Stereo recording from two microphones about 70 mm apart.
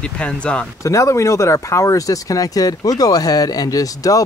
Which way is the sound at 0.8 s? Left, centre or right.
Left.